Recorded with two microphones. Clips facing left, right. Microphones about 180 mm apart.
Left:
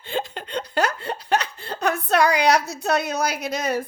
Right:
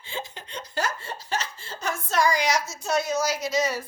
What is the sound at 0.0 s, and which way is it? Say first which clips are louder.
Laughter: left 8 dB; 60° left (ahead or behind).